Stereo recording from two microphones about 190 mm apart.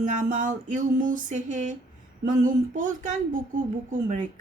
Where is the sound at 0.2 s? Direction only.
45° right (ahead or behind).